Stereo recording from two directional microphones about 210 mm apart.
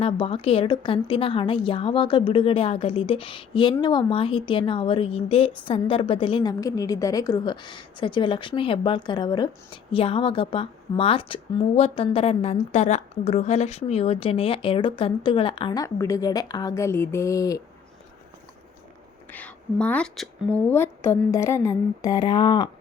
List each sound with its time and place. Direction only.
0.0 s a woman's voice: 25° left (ahead or behind)
19.3 s a woman's voice: 5° left (ahead or behind)